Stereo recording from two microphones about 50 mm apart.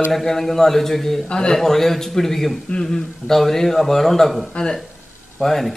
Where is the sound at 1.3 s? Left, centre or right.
Centre.